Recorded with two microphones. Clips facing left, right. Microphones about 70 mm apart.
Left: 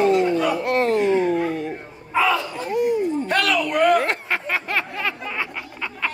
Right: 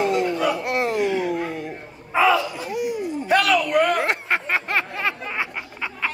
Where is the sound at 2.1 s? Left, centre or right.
Centre.